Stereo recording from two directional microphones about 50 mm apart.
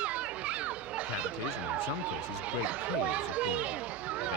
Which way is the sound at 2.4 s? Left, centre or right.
Right.